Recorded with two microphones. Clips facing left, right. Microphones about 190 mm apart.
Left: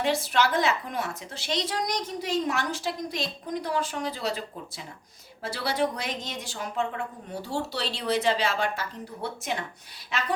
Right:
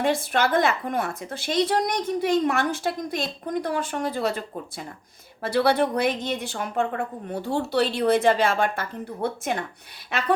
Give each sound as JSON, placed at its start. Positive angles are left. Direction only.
{"t": 0.0, "sound": "a woman's voice", "side_deg": -55}